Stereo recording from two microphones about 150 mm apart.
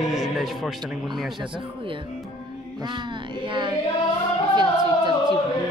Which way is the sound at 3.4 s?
35° right (ahead or behind).